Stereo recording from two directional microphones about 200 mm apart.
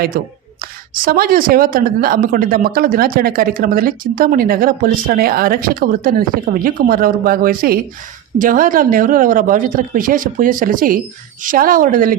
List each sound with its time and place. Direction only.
0.1 s speech: 45° right (ahead or behind)